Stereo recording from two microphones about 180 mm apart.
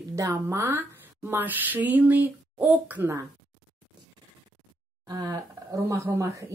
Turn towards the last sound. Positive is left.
turn(degrees=-15)  # may be behind; listen again after turning